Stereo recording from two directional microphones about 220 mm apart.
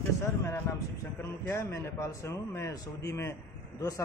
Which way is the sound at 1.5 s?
10° left (ahead or behind).